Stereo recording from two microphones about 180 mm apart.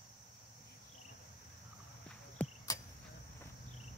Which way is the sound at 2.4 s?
10° left (ahead or behind).